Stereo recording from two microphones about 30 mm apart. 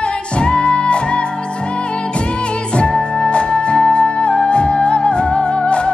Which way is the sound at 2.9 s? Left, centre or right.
Left.